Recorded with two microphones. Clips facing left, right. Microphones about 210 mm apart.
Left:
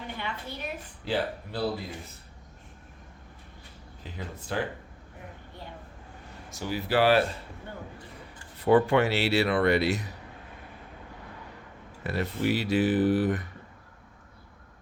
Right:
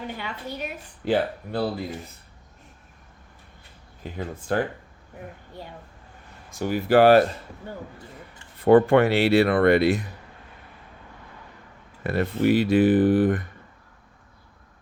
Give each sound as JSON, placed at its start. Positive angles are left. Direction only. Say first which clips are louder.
{"t": 1.0, "sound": "speech", "louder": "right 6 dB", "side_deg": -55}
{"t": 4.0, "sound": "speech", "louder": "right 7 dB", "side_deg": -50}
{"t": 6.5, "sound": "speech", "louder": "right 8 dB", "side_deg": -50}
{"t": 8.5, "sound": "speech", "louder": "right 6 dB", "side_deg": -55}
{"t": 12.0, "sound": "speech", "louder": "right 6 dB", "side_deg": -55}